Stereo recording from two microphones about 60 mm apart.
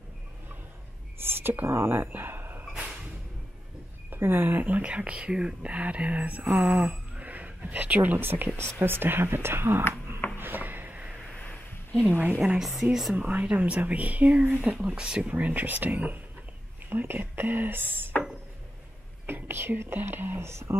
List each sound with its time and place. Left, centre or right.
1.2 s speech: right
2.6 s a sound: centre
4.1 s speech: right
4.8 s speech: centre; by 9.8 s right
10.3 s a sound: right
11.4 s a sound: left
12.0 s speech: right
12.4 s a woman's voice: centre
13.1 s speech: right
19.2 s speech: right